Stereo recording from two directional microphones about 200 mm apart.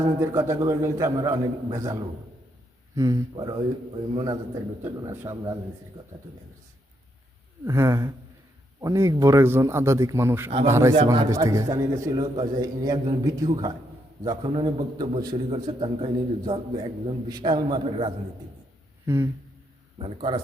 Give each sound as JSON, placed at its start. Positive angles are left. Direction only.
{"t": 0.2, "sound": "a man's voice", "side_deg": -15}
{"t": 7.6, "sound": "a man's voice", "side_deg": -15}
{"t": 10.9, "sound": "a man's voice", "side_deg": -25}